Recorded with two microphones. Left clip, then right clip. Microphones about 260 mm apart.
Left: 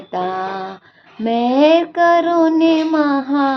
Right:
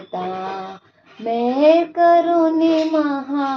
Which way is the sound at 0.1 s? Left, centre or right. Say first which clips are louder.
Left 5 dB; left.